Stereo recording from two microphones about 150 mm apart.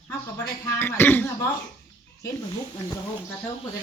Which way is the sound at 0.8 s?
15° left (ahead or behind).